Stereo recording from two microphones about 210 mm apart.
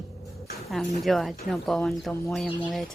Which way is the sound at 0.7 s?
Centre (ahead or behind).